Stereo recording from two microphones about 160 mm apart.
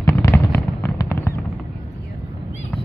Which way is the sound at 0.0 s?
15° left (ahead or behind).